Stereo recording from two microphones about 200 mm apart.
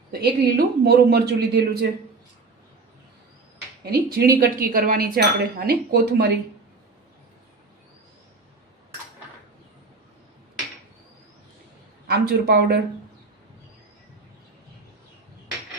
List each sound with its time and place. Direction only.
0.1 s speech: 50° right (ahead or behind)
3.8 s speech: 50° right (ahead or behind)
12.0 s speech: 50° right (ahead or behind)